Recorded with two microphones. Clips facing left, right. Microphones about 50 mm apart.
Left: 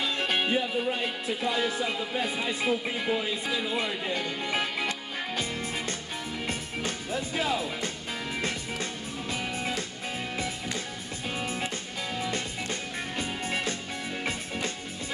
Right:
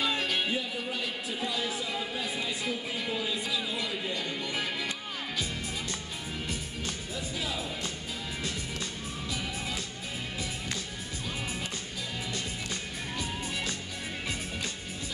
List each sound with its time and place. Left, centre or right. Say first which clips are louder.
0.2 s speech: left 4 dB; left
6.4 s music: left 5 dB; left
9.3 s music: left 5 dB; left
12.2 s music: left 5 dB; left